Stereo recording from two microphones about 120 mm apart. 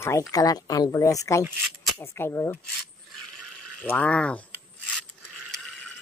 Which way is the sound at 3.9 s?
10° left (ahead or behind).